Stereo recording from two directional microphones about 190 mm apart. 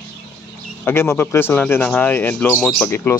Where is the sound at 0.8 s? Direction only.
15° left (ahead or behind).